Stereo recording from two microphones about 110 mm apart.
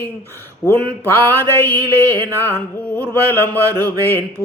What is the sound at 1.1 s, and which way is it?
Mantra, 20° left (ahead or behind).